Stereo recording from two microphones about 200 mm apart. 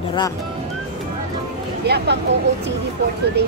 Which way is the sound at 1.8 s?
55° right (ahead or behind).